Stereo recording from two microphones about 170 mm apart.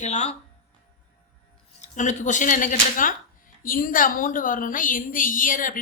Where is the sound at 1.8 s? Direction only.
45° left (ahead or behind).